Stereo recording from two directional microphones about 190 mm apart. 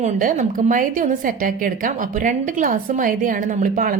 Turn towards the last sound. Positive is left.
turn(degrees=-45)  # may be behind; listen again after turning